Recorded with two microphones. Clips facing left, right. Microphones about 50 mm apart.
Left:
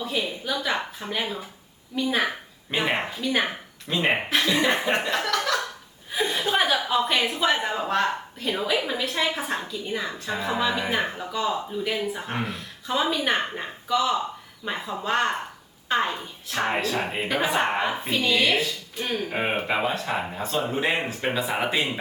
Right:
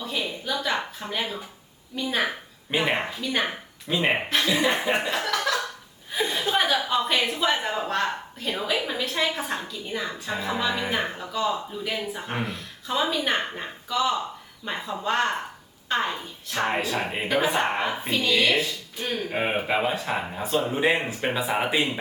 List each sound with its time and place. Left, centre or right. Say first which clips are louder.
0.0 s a woman's voice: left 2 dB; centre
4.9 s chuckle: left 1 dB; centre
6.1 s a woman's voice: left 1 dB; centre